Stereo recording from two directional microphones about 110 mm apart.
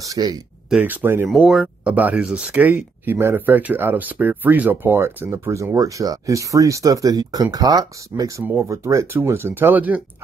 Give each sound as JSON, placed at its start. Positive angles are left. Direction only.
{"t": 0.0, "sound": "a sound", "side_deg": -35}
{"t": 0.8, "sound": "speech", "side_deg": -15}
{"t": 1.4, "sound": "speech", "side_deg": -5}